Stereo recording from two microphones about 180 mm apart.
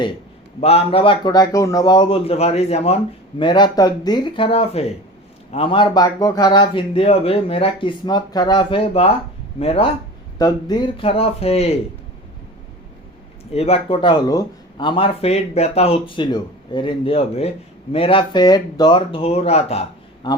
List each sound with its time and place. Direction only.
0.6 s a man's voice: 35° left (ahead or behind)
10.3 s a man's voice: 20° left (ahead or behind)
13.5 s a man's voice: 35° left (ahead or behind)
20.2 s speech: 25° left (ahead or behind)